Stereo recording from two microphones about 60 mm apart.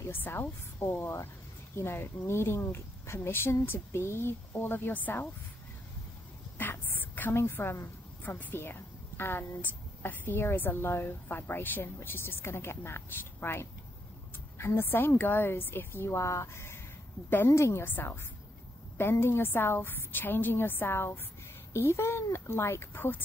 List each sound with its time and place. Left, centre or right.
0.1 s a woman's voice: left
6.6 s a sound: left
7.3 s a woman's voice: left
8.2 s a woman's voice: left
9.6 s a woman's voice: left
17.8 s a woman's voice: left